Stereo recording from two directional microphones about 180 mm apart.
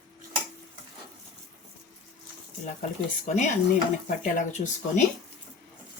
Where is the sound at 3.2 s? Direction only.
45° left (ahead or behind).